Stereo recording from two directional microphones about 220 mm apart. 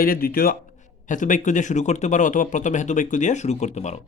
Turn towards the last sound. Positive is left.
turn(degrees=30)  # may be behind; listen again after turning